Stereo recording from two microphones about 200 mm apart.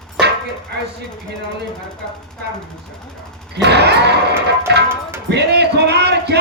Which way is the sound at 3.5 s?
55° right (ahead or behind).